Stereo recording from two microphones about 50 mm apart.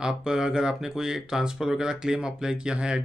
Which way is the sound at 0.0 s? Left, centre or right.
Centre.